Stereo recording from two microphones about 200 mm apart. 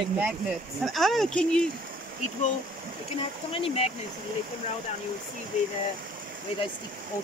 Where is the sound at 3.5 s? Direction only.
30° left (ahead or behind).